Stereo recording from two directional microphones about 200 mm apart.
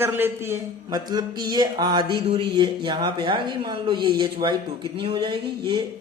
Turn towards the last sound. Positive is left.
turn(degrees=-25)  # may be behind; listen again after turning